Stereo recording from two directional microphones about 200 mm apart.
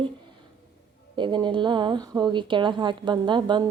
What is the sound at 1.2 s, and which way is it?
A woman's voice, 25° right (ahead or behind).